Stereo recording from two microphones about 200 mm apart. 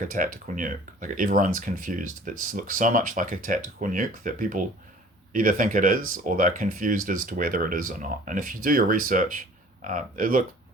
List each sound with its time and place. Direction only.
0.1 s speech: 40° right (ahead or behind)